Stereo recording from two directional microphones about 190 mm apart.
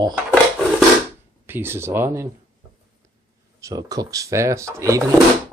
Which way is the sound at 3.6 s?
15° right (ahead or behind).